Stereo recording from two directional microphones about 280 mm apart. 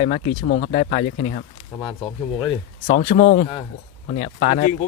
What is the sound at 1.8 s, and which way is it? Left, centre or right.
Speech, centre.